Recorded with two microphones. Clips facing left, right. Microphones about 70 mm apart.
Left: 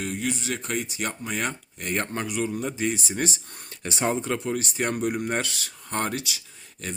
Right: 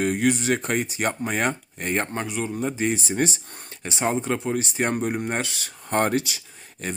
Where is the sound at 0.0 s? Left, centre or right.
Right.